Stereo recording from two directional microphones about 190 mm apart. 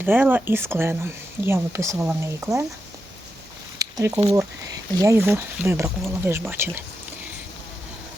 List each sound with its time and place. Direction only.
0.0 s speech: 10° right (ahead or behind)
3.8 s a sound: 15° right (ahead or behind)
4.9 s speech: 15° right (ahead or behind)